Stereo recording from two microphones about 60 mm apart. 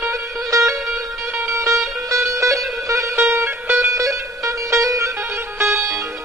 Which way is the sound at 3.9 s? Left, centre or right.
Right.